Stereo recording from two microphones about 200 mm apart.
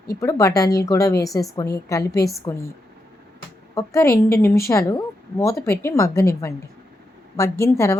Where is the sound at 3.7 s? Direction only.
15° left (ahead or behind).